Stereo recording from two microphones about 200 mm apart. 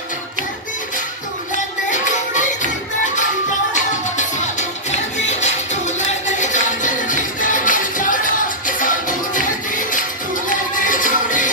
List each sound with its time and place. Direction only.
1.5 s music: 40° left (ahead or behind)
3.7 s music: 40° left (ahead or behind)